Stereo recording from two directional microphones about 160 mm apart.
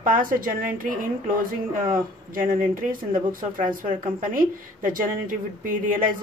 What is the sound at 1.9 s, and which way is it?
A woman's voice, 60° right (ahead or behind).